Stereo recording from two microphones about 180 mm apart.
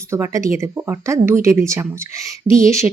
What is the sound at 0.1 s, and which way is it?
Speech, 15° right (ahead or behind).